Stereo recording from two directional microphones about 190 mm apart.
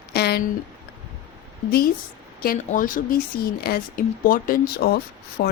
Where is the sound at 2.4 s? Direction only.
45° left (ahead or behind).